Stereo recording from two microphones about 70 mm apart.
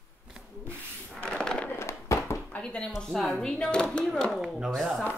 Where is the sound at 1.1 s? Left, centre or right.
Centre.